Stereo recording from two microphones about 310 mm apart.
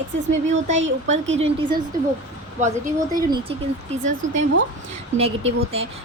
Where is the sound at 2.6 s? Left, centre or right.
Right.